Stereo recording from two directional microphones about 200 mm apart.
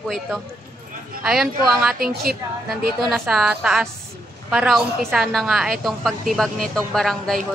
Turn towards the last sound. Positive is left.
turn(degrees=0)  # may be behind; listen again after turning